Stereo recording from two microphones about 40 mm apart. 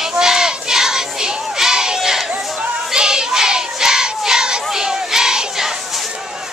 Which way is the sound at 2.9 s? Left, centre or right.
Centre.